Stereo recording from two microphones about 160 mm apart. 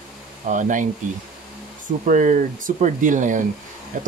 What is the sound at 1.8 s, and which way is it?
A man's voice, 55° right (ahead or behind).